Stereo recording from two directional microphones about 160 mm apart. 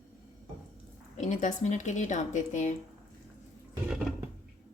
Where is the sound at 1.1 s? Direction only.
50° left (ahead or behind).